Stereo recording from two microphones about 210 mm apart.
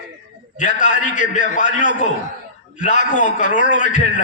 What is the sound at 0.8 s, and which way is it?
A man's voice, 35° left (ahead or behind).